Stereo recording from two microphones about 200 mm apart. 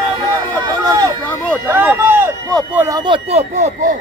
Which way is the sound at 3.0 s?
30° right (ahead or behind).